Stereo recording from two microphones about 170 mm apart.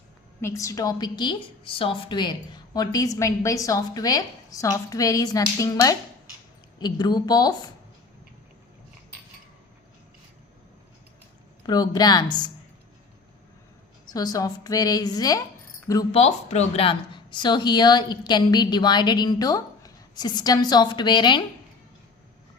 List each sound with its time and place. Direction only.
0.4 s a woman's voice: 20° left (ahead or behind)
11.6 s a woman's voice: 25° left (ahead or behind)
14.1 s a woman's voice: 20° left (ahead or behind)
16.1 s a woman's voice: 40° left (ahead or behind)